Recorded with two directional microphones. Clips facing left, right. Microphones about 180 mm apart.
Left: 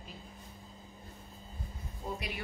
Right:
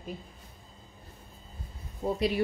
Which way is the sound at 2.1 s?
30° right (ahead or behind).